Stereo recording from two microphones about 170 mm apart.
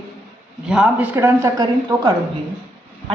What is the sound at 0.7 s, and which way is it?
Speech, 5° right (ahead or behind).